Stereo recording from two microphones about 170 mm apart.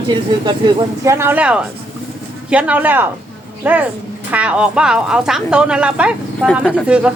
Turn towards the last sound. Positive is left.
turn(degrees=-5)  # may be behind; listen again after turning